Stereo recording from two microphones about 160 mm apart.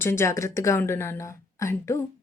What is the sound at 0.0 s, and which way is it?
Speech, 15° left (ahead or behind).